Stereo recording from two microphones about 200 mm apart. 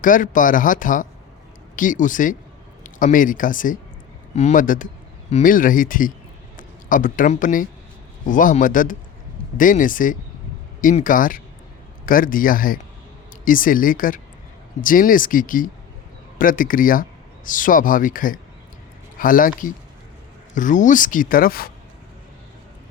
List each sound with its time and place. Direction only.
0.0 s speech: 40° left (ahead or behind)